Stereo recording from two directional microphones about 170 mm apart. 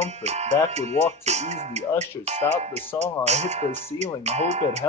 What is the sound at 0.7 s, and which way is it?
Speech, 40° right (ahead or behind).